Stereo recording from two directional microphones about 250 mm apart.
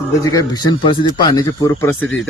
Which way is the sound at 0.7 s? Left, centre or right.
Centre.